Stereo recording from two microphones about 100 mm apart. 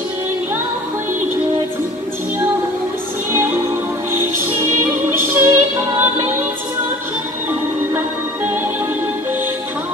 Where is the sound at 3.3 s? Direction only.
25° right (ahead or behind).